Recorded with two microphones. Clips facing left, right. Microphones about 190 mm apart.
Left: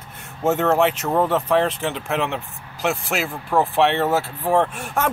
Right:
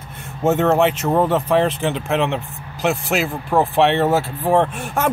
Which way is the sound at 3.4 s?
20° right (ahead or behind).